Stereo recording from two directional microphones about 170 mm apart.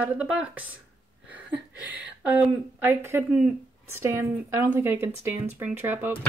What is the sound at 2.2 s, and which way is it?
Speech, 10° right (ahead or behind).